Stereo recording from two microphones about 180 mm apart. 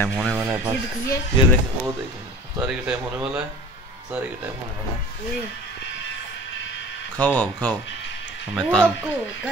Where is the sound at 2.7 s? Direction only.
5° right (ahead or behind).